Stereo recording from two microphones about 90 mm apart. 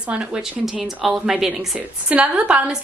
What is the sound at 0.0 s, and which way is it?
A woman's voice, 10° right (ahead or behind).